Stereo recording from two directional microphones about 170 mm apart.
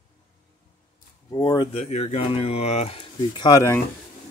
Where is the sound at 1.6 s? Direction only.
35° left (ahead or behind).